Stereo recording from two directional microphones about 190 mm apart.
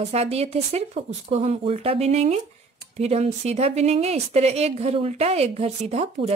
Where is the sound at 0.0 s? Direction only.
35° right (ahead or behind).